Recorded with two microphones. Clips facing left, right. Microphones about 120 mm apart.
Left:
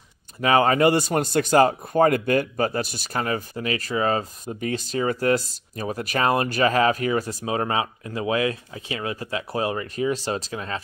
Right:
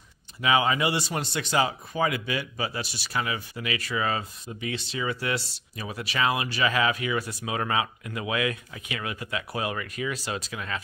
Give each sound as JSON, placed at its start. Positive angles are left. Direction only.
{"t": 0.4, "sound": "speech", "side_deg": 45}